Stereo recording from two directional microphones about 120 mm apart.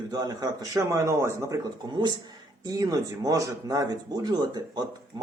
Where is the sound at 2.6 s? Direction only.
30° right (ahead or behind).